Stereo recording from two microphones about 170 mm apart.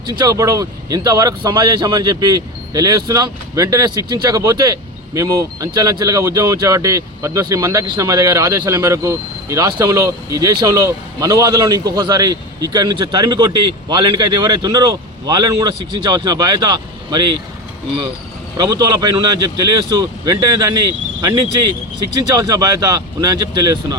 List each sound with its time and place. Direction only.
0.0 s speech: 25° right (ahead or behind)
18.5 s speech: 25° right (ahead or behind)